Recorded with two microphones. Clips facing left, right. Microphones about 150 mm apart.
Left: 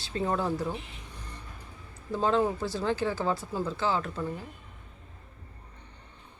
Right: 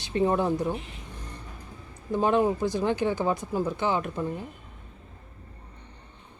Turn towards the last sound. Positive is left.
turn(degrees=-20)  # may be behind; listen again after turning